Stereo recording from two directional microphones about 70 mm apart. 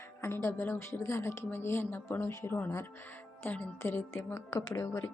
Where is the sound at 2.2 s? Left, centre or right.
Left.